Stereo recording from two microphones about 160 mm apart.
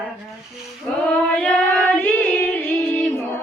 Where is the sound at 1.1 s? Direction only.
5° left (ahead or behind).